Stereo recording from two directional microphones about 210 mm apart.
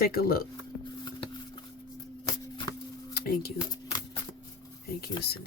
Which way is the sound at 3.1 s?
45° left (ahead or behind).